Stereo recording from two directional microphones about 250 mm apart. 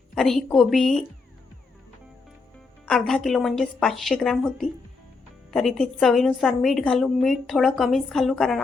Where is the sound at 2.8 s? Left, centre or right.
Centre.